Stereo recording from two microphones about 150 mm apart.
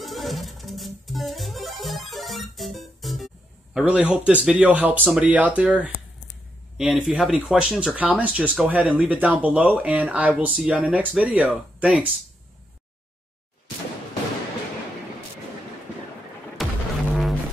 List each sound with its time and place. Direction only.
0.0 s music: centre (ahead or behind)
3.7 s speech: 10° right (ahead or behind)
16.6 s music: centre (ahead or behind)